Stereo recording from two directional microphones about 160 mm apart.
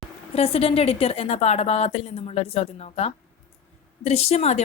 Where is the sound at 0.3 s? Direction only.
40° left (ahead or behind).